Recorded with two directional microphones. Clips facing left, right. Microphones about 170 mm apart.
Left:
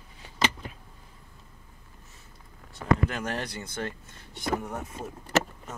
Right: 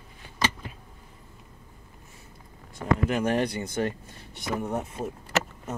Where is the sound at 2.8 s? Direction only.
15° right (ahead or behind).